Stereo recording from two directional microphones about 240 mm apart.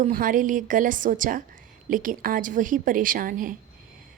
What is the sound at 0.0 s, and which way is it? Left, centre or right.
A woman's voice, right.